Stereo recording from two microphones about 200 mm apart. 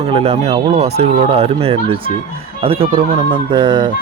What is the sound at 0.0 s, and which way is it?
Speech, 30° right (ahead or behind).